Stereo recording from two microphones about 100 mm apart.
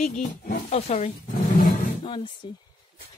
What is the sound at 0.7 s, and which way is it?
Speech, 90° left.